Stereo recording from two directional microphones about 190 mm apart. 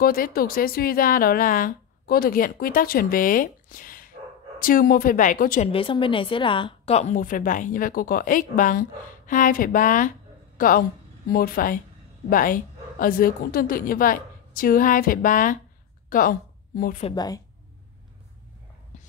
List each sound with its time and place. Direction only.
0.0 s a woman's voice: 50° left (ahead or behind)
5.7 s a woman's voice: 30° left (ahead or behind); by 17.0 s 50° left (ahead or behind)
17.1 s a woman's voice: 20° left (ahead or behind)